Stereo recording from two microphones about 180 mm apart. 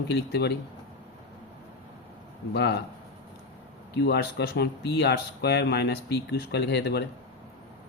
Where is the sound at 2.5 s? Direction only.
65° left (ahead or behind).